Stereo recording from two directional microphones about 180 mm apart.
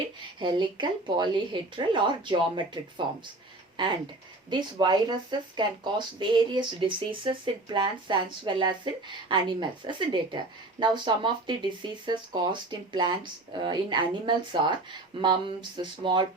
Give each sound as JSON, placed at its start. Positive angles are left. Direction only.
{"t": 0.3, "sound": "speech", "side_deg": -25}
{"t": 4.4, "sound": "speech", "side_deg": -25}